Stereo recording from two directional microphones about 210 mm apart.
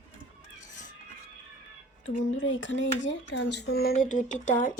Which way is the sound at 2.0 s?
60° left (ahead or behind).